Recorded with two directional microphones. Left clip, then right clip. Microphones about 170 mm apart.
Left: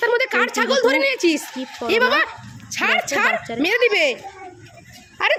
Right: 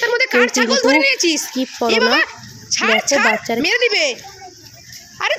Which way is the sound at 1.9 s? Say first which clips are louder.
Right 1 dB; 10° left (ahead or behind).